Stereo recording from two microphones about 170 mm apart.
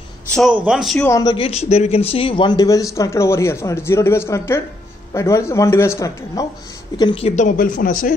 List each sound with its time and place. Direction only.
0.3 s speech: centre (ahead or behind)
1.0 s speech: 20° left (ahead or behind)
1.3 s speech: 35° left (ahead or behind); by 6.4 s 20° left (ahead or behind)
7.0 s speech: 30° left (ahead or behind); by 8.1 s 55° left (ahead or behind)